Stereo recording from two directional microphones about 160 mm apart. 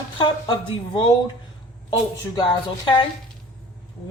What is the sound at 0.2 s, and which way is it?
A woman's voice, 30° left (ahead or behind).